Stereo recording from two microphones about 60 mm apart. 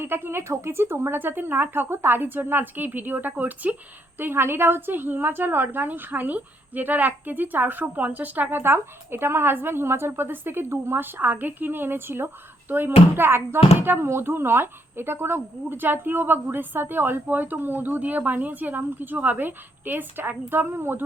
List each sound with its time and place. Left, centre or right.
0.0 s a woman's voice: right
4.2 s a woman's voice: right